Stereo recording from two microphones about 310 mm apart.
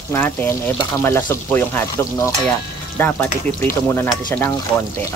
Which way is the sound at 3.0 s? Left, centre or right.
Centre.